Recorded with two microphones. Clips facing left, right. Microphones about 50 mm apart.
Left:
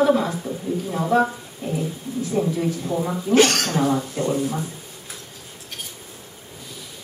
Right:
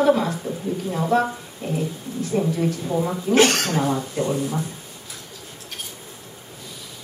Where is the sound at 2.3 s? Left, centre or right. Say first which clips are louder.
Right 1 dB; centre.